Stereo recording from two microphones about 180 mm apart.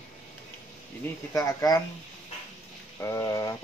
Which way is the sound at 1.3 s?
20° left (ahead or behind).